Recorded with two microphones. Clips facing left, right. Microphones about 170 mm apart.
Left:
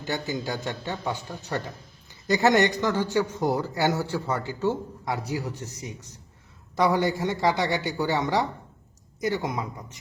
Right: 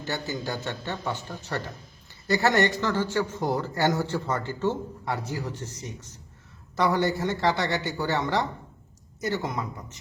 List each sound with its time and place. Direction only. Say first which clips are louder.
0.0 s a man's voice: left 2 dB; 15° left (ahead or behind)